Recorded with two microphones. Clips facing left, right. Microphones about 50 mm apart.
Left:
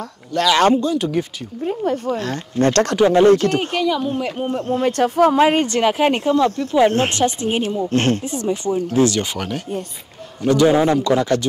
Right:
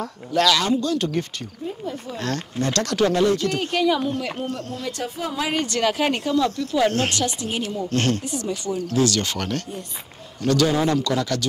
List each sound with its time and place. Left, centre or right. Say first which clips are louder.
0.0 s speech: even; centre
0.9 s speech: left 4 dB; centre
1.6 s speech: left 10 dB; left
3.0 s speech: left 5 dB; left
3.3 s speech: left 8 dB; left
3.8 s speech: right 3 dB; centre
4.4 s speech: left 8 dB; left
4.8 s speech: left 15 dB; left